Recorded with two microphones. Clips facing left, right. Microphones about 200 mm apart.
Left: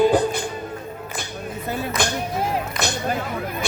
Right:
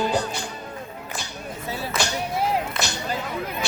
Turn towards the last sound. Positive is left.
turn(degrees=55)  # may be behind; listen again after turning